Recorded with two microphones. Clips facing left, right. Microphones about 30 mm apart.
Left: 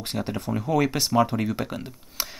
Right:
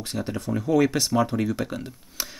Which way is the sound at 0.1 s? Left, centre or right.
Centre.